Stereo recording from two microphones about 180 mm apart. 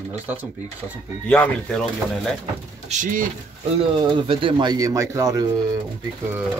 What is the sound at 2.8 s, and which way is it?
Speech, 45° right (ahead or behind).